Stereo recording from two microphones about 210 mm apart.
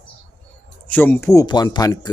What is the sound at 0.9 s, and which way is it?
Speech, 10° left (ahead or behind).